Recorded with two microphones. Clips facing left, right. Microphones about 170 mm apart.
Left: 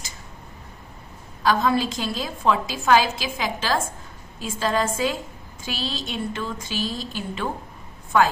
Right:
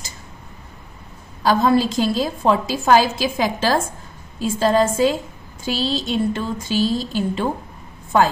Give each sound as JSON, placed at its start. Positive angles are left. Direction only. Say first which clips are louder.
{"t": 1.4, "sound": "a woman's voice", "louder": "right 5 dB", "side_deg": -35}